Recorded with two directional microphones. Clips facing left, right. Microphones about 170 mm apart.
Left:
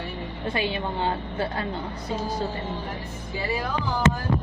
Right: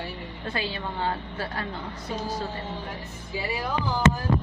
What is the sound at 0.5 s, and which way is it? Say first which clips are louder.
A woman's voice: left 4 dB; 20° left (ahead or behind).